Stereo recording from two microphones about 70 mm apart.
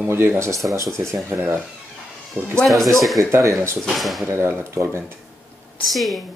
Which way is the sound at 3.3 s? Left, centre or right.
Right.